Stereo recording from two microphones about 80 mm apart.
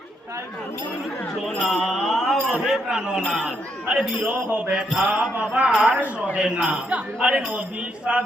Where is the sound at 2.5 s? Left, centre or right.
Centre.